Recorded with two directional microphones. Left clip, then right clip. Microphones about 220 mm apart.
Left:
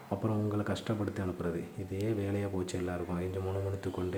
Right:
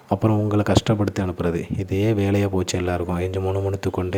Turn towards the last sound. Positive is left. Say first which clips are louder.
# right 12 dB
turn(degrees=-40)  # may be behind; listen again after turning